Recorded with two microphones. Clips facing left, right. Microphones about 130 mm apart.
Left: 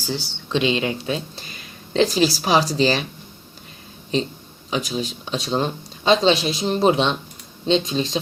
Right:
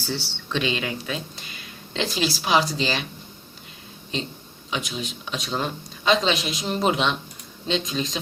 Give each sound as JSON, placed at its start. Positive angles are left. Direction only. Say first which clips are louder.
{"t": 0.0, "sound": "speech", "louder": "left 2 dB", "side_deg": 15}
{"t": 4.7, "sound": "speech", "louder": "left 5 dB", "side_deg": 35}